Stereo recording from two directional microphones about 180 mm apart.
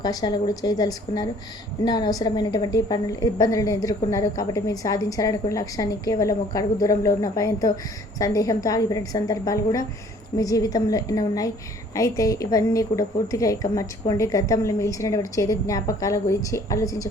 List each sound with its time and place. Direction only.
0.0 s a woman's voice: 20° left (ahead or behind)